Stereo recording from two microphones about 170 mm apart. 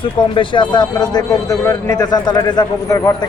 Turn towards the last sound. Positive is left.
turn(degrees=20)  # may be behind; listen again after turning